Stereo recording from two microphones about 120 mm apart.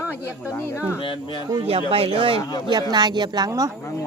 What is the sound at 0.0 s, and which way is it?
Speech, 20° left (ahead or behind).